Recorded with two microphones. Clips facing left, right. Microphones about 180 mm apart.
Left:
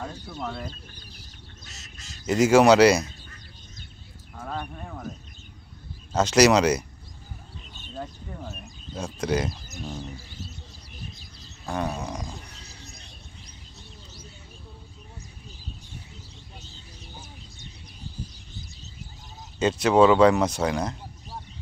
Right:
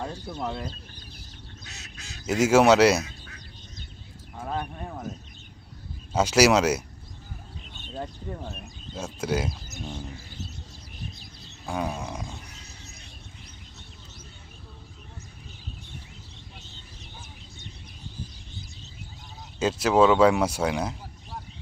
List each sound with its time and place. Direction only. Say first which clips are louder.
0.0 s speech: right 2 dB; 20° right (ahead or behind)
2.2 s speech: left 2 dB; 5° right (ahead or behind)
4.4 s a sound: right 2 dB; 10° right (ahead or behind)
6.1 s speech: left 1 dB; 5° right (ahead or behind)
8.4 s speech: even; 5° right (ahead or behind)
11.6 s speech: left 1 dB; 5° right (ahead or behind)
12.6 s a sound: left 1 dB; 35° left (ahead or behind)
19.5 s speech: left 2 dB; 5° right (ahead or behind)